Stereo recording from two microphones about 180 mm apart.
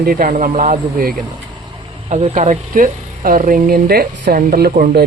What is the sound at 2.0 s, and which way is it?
Speech, 35° right (ahead or behind).